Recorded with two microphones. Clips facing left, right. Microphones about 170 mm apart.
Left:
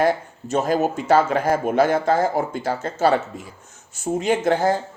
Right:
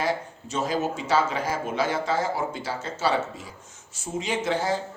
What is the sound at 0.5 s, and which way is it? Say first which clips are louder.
A man's voice: left 6 dB; 55° left (ahead or behind).